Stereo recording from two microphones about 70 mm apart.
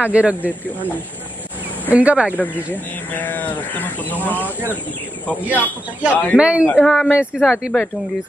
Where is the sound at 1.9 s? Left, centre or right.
Centre.